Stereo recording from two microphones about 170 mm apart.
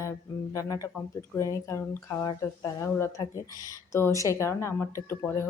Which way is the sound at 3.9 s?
20° left (ahead or behind).